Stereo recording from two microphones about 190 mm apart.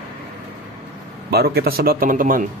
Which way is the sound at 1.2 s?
55° right (ahead or behind).